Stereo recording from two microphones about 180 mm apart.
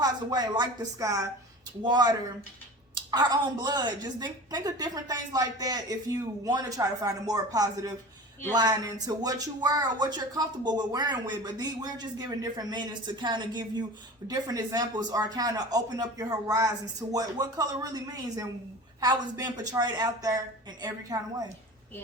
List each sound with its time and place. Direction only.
0.0 s speech: 20° right (ahead or behind)